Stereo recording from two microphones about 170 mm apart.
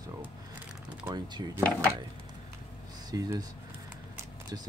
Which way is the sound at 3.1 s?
20° right (ahead or behind).